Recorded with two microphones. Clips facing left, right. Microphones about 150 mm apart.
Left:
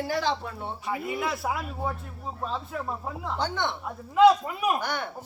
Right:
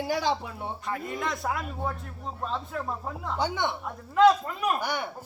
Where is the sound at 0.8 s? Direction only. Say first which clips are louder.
Left 3 dB; 5° left (ahead or behind).